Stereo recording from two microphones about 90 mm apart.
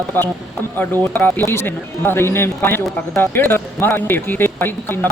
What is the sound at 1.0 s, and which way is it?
Speech, 20° left (ahead or behind).